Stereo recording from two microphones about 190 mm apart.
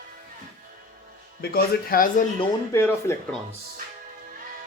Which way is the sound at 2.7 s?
15° left (ahead or behind).